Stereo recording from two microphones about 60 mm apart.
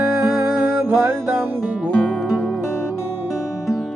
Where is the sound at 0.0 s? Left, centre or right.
Right.